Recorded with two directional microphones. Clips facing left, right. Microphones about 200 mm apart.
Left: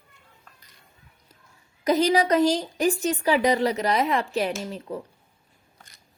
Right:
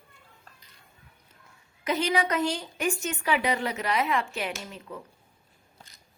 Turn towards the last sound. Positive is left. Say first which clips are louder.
# left 7 dB
turn(degrees=35)  # may be behind; listen again after turning